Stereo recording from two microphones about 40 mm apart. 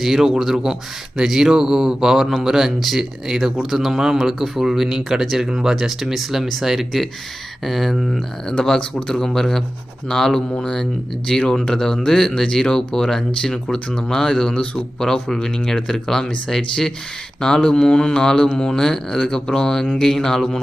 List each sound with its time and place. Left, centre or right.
0.0 s speech: centre
8.4 s speech: centre